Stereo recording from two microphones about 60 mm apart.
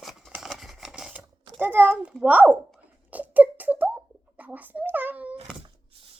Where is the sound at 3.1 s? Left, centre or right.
Right.